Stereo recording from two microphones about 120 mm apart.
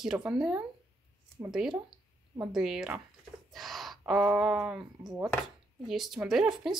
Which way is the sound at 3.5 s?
Centre (ahead or behind).